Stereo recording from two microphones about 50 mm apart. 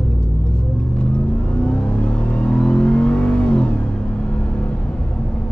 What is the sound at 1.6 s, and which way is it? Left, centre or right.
Vehicle, centre.